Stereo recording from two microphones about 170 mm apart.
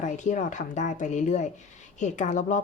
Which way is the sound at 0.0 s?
45° left (ahead or behind).